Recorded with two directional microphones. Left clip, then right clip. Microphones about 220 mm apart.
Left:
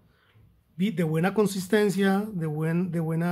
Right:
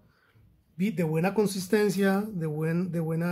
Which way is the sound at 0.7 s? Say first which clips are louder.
Left 1 dB; 15° left (ahead or behind).